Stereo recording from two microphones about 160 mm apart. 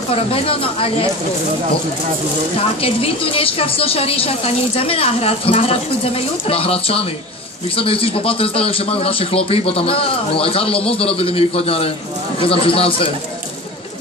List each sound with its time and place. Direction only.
0.1 s a woman's voice: 35° left (ahead or behind)
2.8 s a woman's voice: 35° left (ahead or behind)